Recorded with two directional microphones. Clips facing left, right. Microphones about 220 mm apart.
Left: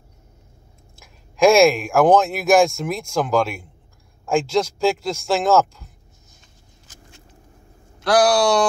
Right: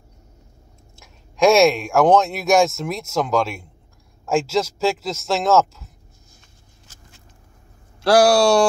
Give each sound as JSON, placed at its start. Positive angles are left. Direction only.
{"t": 0.9, "sound": "speech", "side_deg": 0}
{"t": 8.1, "sound": "speech", "side_deg": -25}